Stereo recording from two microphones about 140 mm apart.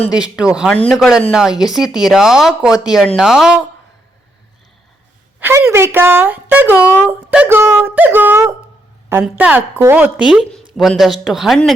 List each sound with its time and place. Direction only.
0.1 s speech: 5° right (ahead or behind)
5.4 s speech: 15° right (ahead or behind); by 11.7 s centre (ahead or behind)